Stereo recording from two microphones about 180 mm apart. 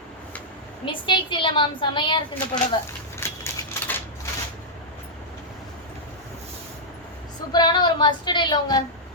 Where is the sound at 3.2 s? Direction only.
15° left (ahead or behind).